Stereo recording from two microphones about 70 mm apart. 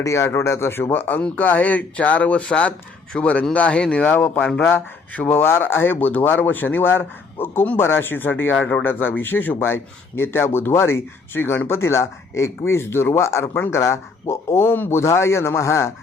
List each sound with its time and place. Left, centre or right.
0.0 s speech: left
5.4 s speech: left
8.5 s speech: centre
8.8 s speech: left